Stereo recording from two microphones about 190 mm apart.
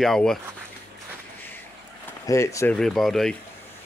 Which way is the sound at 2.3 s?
15° left (ahead or behind).